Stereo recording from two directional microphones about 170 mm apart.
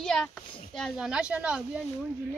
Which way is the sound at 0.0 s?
5° left (ahead or behind).